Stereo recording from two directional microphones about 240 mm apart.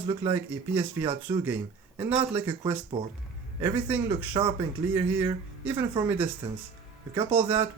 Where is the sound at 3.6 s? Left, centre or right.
Centre.